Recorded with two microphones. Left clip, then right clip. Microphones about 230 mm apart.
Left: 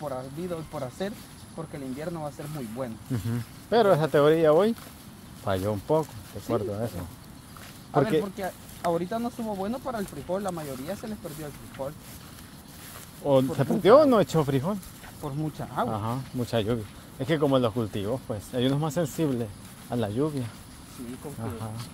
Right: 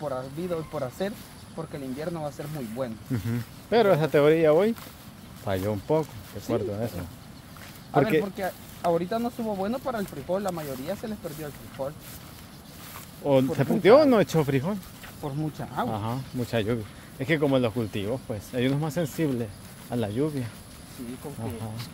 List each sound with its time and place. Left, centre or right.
0.0 s speech: centre
13.2 s speech: centre
15.5 s speech: left
15.9 s speech: centre